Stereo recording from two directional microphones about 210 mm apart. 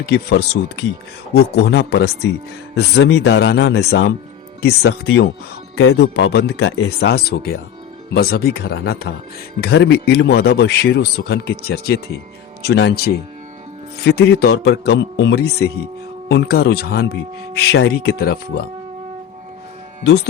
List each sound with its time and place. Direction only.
0.0 s a man's voice: 50° left (ahead or behind)